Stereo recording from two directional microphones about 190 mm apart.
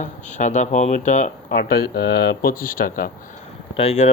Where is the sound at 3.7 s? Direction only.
35° left (ahead or behind).